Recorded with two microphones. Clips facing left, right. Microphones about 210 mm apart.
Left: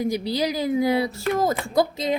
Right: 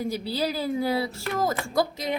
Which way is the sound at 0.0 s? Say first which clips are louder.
Left 4 dB; 15° left (ahead or behind).